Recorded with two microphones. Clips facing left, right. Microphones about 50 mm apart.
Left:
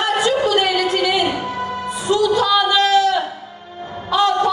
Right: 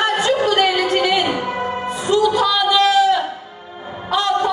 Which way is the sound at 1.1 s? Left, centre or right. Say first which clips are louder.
Even; right.